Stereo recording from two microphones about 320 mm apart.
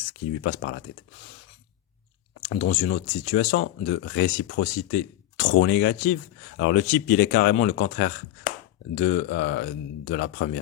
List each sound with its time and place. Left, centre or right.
0.4 s speech: left
2.4 s speech: left